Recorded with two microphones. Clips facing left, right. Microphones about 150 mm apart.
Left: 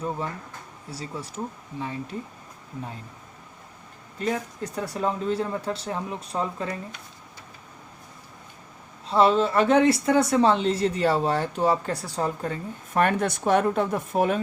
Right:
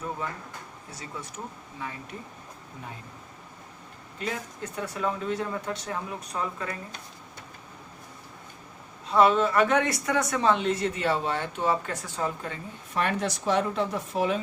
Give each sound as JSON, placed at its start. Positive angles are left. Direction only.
{"t": 0.9, "sound": "speech", "side_deg": 30}
{"t": 4.2, "sound": "speech", "side_deg": 35}
{"t": 9.0, "sound": "speech", "side_deg": 30}